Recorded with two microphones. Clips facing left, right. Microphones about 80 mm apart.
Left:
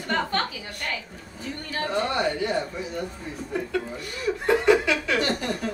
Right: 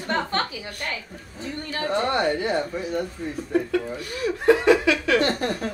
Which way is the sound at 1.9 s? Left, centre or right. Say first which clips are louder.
Right 3 dB; right.